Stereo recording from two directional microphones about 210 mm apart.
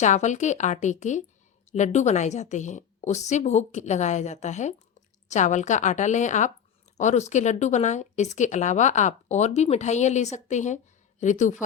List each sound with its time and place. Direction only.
0.0 s speech: 35° left (ahead or behind)